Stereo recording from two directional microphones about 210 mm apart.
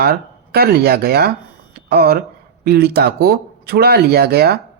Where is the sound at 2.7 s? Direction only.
50° right (ahead or behind).